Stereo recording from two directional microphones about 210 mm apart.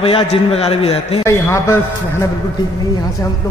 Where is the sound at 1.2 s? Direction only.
15° left (ahead or behind).